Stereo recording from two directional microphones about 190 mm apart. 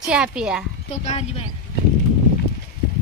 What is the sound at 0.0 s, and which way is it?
Speech, 5° right (ahead or behind).